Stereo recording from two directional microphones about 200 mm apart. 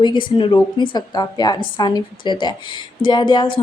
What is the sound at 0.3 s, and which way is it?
Speech, 25° left (ahead or behind).